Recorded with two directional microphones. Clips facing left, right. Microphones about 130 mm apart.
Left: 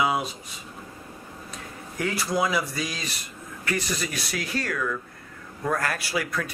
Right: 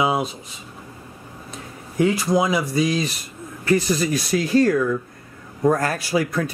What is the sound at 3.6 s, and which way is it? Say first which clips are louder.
Speech: right 10 dB; 30° right (ahead or behind).